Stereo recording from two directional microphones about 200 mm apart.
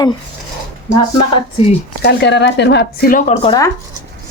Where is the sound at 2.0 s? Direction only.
55° left (ahead or behind).